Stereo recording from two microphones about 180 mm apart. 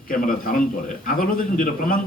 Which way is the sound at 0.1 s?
50° left (ahead or behind).